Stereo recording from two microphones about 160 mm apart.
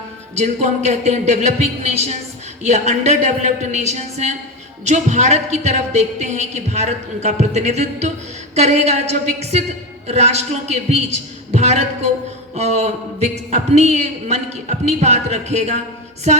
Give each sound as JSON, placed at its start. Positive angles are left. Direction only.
{"t": 0.3, "sound": "a man's voice", "side_deg": -45}